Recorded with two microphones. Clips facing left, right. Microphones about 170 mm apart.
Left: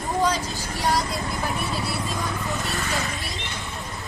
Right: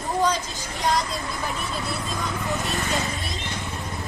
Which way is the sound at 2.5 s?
Centre (ahead or behind).